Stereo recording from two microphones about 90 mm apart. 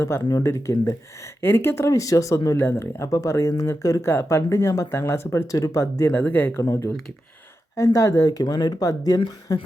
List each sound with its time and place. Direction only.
0.1 s speech: 30° left (ahead or behind)
6.1 s speech: 20° left (ahead or behind)
6.6 s speech: 35° left (ahead or behind)